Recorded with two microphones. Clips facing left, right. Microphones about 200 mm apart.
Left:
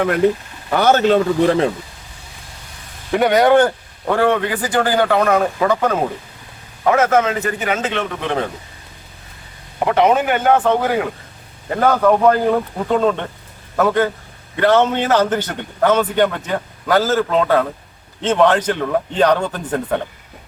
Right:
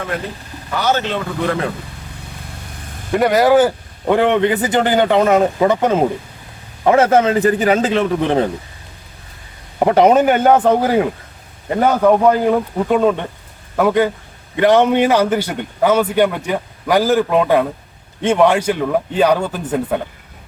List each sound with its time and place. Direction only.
0.7 s a man's voice: 50° left (ahead or behind)
3.1 s speech: centre (ahead or behind)
4.0 s speech: 20° right (ahead or behind)
6.8 s a man's voice: 30° right (ahead or behind)
9.8 s a man's voice: 40° right (ahead or behind)
11.8 s a man's voice: 15° right (ahead or behind)